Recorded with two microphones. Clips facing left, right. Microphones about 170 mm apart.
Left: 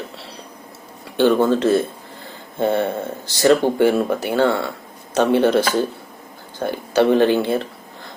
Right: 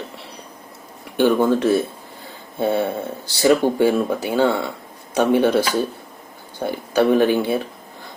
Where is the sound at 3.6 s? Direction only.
15° left (ahead or behind).